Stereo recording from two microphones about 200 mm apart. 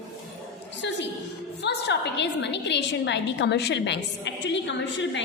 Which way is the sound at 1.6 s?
55° left (ahead or behind).